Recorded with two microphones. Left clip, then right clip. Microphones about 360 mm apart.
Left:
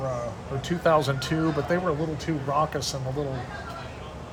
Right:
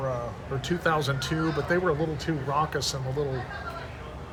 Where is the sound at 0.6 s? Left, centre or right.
Centre.